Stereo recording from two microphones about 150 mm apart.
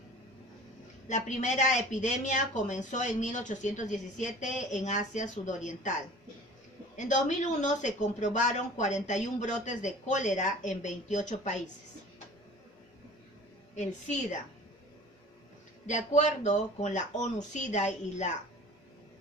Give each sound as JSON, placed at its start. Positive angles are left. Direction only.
{"t": 1.0, "sound": "speech", "side_deg": 55}
{"t": 6.9, "sound": "speech", "side_deg": 55}
{"t": 15.9, "sound": "speech", "side_deg": 55}